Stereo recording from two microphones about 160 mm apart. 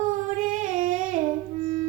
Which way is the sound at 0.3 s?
55° right (ahead or behind).